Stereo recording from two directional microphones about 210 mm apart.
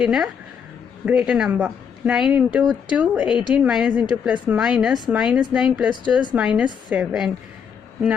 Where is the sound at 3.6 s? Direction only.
5° right (ahead or behind).